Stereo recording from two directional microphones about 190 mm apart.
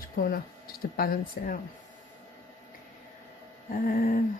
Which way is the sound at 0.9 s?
50° left (ahead or behind).